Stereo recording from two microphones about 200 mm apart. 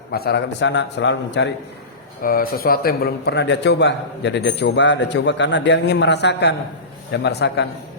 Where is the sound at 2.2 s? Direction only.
45° left (ahead or behind).